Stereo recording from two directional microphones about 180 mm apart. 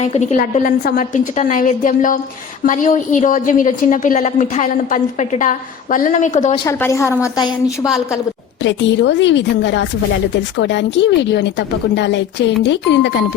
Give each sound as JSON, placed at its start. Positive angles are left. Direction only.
{"t": 0.0, "sound": "a woman's voice", "side_deg": 35}
{"t": 6.7, "sound": "a woman's voice", "side_deg": 15}
{"t": 8.6, "sound": "a woman's voice", "side_deg": 85}